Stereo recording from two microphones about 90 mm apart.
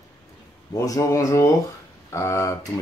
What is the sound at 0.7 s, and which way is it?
Speech, 40° left (ahead or behind).